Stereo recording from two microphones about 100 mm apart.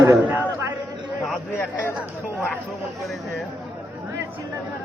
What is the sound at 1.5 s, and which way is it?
Speech, 25° left (ahead or behind).